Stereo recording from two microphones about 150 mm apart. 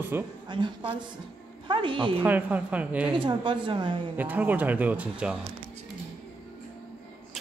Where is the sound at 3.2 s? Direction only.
35° right (ahead or behind).